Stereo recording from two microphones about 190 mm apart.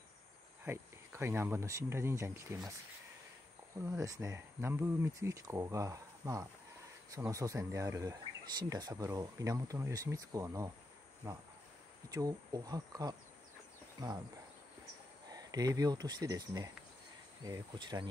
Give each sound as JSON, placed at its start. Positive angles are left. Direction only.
{"t": 0.7, "sound": "speech", "side_deg": -15}
{"t": 3.7, "sound": "speech", "side_deg": -15}
{"t": 15.2, "sound": "speech", "side_deg": -20}